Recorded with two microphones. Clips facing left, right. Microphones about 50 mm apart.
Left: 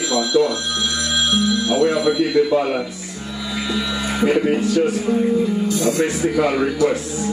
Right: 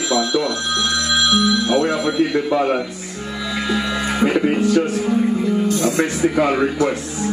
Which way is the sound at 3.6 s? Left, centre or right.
Right.